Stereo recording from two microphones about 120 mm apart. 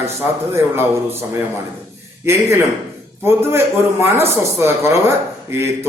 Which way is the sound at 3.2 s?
20° right (ahead or behind).